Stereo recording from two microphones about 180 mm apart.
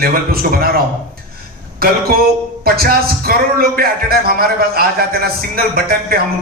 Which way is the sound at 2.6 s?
55° right (ahead or behind).